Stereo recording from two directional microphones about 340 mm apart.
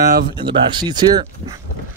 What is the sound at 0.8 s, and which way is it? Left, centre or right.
Speech, centre.